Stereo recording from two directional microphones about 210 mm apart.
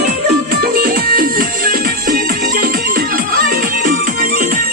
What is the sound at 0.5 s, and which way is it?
Music, 45° right (ahead or behind).